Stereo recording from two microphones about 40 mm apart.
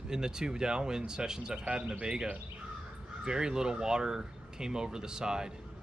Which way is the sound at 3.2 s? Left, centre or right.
Centre.